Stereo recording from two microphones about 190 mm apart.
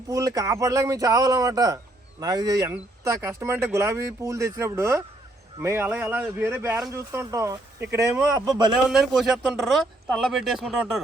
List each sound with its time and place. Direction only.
0.1 s speech: 20° right (ahead or behind)
8.9 s speech: centre (ahead or behind)